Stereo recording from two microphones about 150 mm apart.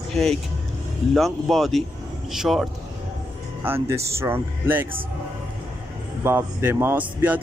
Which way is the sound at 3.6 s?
15° right (ahead or behind).